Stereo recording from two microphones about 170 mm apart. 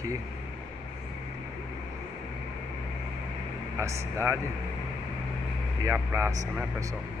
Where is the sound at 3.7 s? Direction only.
15° right (ahead or behind).